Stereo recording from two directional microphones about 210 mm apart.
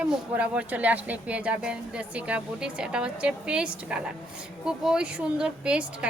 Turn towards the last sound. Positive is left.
turn(degrees=-5)  # may be behind; listen again after turning